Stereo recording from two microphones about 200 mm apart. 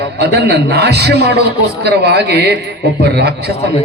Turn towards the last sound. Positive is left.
turn(degrees=-55)  # may be behind; listen again after turning